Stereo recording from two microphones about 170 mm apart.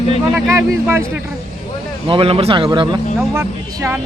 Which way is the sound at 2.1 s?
35° right (ahead or behind).